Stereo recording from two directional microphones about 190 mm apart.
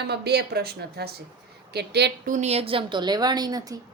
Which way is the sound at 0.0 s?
60° right (ahead or behind).